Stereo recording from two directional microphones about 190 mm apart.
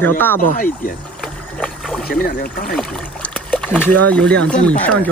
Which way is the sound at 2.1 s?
55° left (ahead or behind).